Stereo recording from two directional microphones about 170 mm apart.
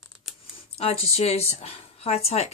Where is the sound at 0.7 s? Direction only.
35° left (ahead or behind).